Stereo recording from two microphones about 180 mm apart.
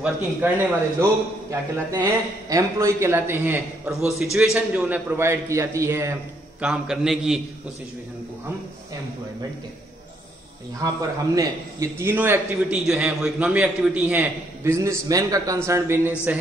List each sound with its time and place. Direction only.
0.0 s a man's voice: 10° right (ahead or behind)
6.6 s a man's voice: 5° right (ahead or behind)
10.8 s a man's voice: 20° right (ahead or behind)